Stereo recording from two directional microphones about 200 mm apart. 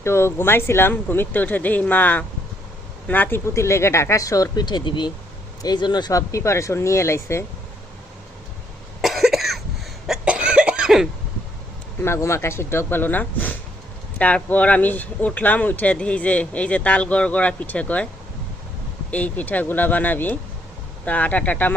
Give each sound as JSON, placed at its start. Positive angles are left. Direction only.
{"t": 0.0, "sound": "speech", "side_deg": 15}
{"t": 9.0, "sound": "cough", "side_deg": 0}
{"t": 12.0, "sound": "speech", "side_deg": 15}
{"t": 19.1, "sound": "speech", "side_deg": 5}